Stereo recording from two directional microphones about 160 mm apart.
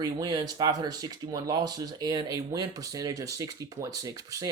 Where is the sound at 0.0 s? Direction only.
25° right (ahead or behind).